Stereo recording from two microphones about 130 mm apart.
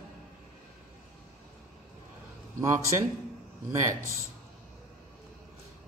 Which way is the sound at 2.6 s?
25° right (ahead or behind).